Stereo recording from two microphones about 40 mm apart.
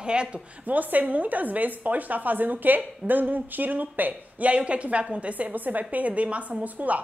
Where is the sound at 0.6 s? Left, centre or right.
Right.